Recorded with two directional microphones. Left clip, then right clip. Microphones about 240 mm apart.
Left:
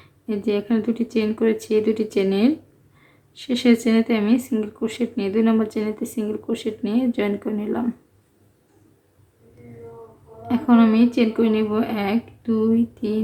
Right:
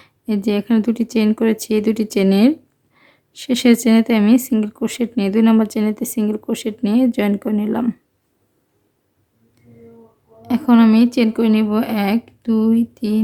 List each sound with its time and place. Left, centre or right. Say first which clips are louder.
0.0 s a woman's voice: right 3 dB; right
10.5 s a woman's voice: right 4 dB; right